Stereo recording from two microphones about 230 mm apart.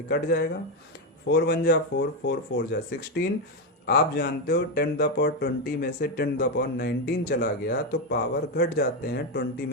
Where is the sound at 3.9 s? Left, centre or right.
Left.